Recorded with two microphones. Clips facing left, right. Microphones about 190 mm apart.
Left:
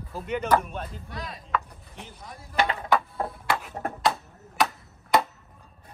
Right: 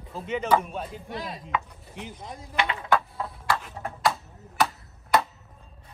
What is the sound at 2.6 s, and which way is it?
Speech, 40° left (ahead or behind).